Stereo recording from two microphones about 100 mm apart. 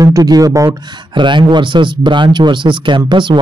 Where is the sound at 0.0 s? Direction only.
40° right (ahead or behind).